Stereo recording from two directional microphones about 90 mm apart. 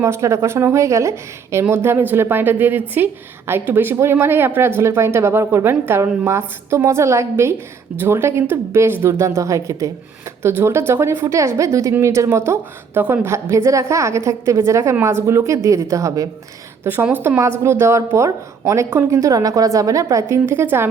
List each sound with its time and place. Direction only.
0.0 s a woman's voice: 30° right (ahead or behind)
16.8 s a woman's voice: 20° right (ahead or behind)